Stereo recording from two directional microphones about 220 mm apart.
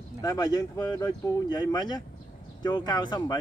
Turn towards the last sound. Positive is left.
turn(degrees=20)  # may be behind; listen again after turning